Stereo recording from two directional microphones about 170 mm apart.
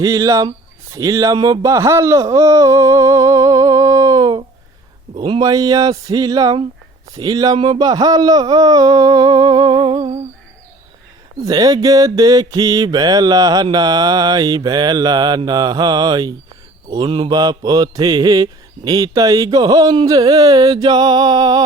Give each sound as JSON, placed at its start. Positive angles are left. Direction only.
{"t": 0.0, "sound": "mantra", "side_deg": -20}
{"t": 0.9, "sound": "speech", "side_deg": -20}
{"t": 5.1, "sound": "mantra", "side_deg": -25}
{"t": 11.4, "sound": "mantra", "side_deg": -20}